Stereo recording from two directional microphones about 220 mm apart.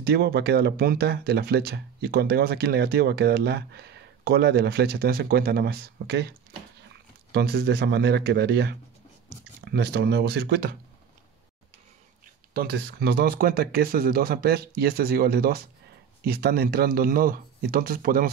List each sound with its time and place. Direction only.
0.0 s speech: 45° right (ahead or behind)
7.3 s speech: 45° right (ahead or behind)
12.5 s speech: 45° right (ahead or behind)